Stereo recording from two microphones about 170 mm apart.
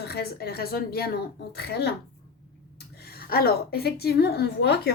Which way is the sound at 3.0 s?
65° left (ahead or behind).